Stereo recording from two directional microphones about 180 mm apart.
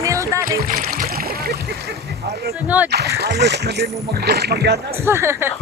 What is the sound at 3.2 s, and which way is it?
Speech, 65° right (ahead or behind).